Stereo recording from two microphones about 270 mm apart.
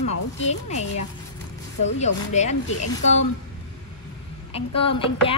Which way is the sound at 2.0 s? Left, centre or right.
Left.